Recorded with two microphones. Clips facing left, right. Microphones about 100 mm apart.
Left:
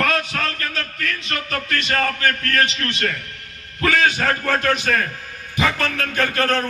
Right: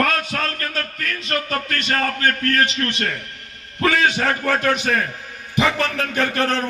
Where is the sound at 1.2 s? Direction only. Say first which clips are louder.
Right 3 dB; 40° right (ahead or behind).